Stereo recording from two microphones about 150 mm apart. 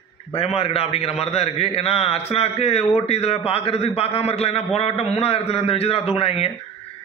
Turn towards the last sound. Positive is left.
turn(degrees=40)  # may be behind; listen again after turning